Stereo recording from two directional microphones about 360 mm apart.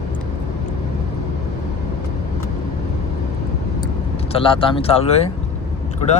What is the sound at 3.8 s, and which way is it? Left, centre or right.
Vehicle, centre.